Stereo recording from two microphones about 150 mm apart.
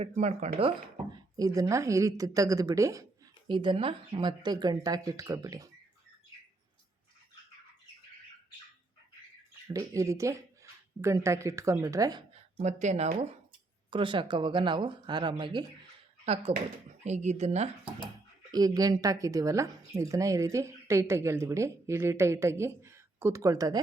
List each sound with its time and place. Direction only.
0.0 s speech: 50° right (ahead or behind)
1.1 s speech: 25° right (ahead or behind)
3.4 s speech: 30° right (ahead or behind)
9.7 s speech: 20° right (ahead or behind)
12.3 s speech: 45° right (ahead or behind)
13.9 s speech: 35° right (ahead or behind)
16.2 s speech: 45° right (ahead or behind)
18.5 s speech: 25° right (ahead or behind)